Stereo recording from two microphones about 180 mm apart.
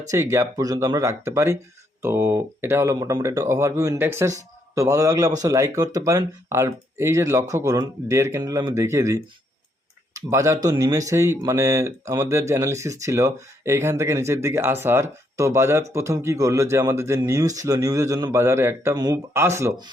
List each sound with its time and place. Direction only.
0.1 s speech: 15° right (ahead or behind)